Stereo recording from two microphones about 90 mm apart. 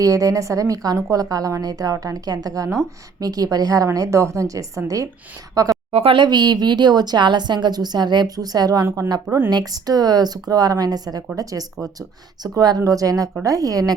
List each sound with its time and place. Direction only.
0.0 s a woman's voice: 40° right (ahead or behind)
6.0 s speech: 85° right
6.2 s a woman's voice: 50° right (ahead or behind)